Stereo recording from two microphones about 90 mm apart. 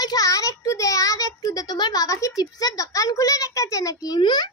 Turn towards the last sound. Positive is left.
turn(degrees=55)  # may be behind; listen again after turning